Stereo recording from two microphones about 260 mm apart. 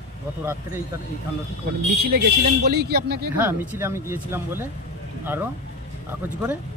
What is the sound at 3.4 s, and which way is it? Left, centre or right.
Speech, centre.